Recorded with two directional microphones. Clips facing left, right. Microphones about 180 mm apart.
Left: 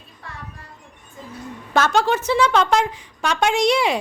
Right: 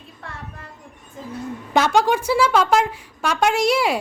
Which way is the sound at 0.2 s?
55° right (ahead or behind).